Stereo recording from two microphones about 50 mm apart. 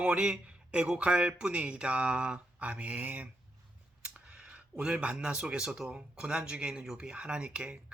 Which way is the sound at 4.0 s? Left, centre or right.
Centre.